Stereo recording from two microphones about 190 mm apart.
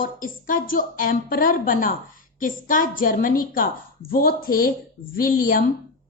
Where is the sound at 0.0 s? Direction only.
45° left (ahead or behind).